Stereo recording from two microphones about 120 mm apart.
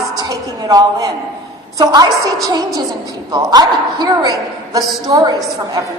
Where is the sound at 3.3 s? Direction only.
35° right (ahead or behind).